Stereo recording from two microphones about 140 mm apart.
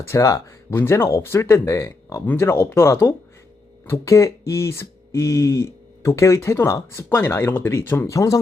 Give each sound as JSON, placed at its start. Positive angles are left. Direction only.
{"t": 0.1, "sound": "speech", "side_deg": 20}